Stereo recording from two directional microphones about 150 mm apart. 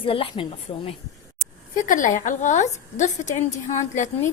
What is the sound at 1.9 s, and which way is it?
A woman's voice, 60° left (ahead or behind).